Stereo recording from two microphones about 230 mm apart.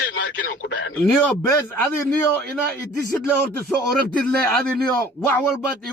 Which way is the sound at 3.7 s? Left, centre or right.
Centre.